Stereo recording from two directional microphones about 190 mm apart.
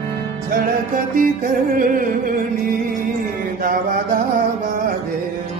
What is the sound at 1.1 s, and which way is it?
Music, 50° right (ahead or behind).